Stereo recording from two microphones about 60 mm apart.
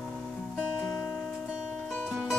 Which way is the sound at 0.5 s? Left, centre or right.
Centre.